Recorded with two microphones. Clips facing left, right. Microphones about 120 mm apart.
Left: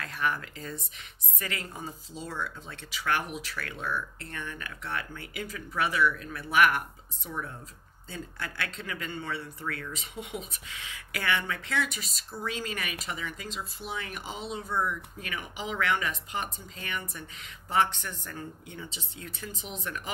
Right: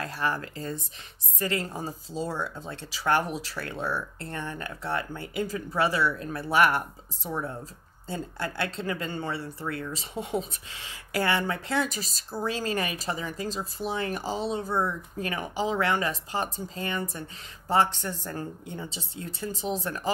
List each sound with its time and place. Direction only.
0.0 s speech: 35° right (ahead or behind)